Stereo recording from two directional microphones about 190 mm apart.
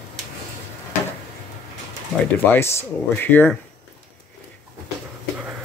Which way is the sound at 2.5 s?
15° left (ahead or behind).